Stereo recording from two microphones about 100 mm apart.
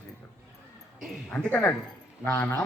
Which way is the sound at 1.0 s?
Centre (ahead or behind).